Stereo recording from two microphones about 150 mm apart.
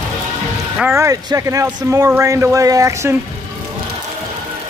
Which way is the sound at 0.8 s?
20° right (ahead or behind).